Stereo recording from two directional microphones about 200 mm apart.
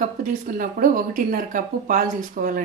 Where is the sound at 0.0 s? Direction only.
40° right (ahead or behind).